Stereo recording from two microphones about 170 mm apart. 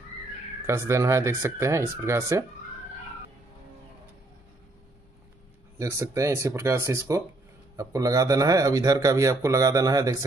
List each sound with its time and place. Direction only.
0.7 s speech: 15° right (ahead or behind)
5.8 s speech: 15° right (ahead or behind)